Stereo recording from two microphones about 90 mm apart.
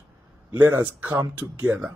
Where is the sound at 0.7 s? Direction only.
20° right (ahead or behind).